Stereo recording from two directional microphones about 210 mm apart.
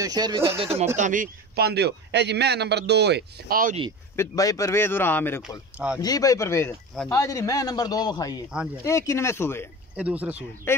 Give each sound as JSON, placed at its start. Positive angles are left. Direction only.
{"t": 0.0, "sound": "speech", "side_deg": -20}
{"t": 0.6, "sound": "a man's voice", "side_deg": -30}
{"t": 4.2, "sound": "speech", "side_deg": 15}
{"t": 9.9, "sound": "speech", "side_deg": -5}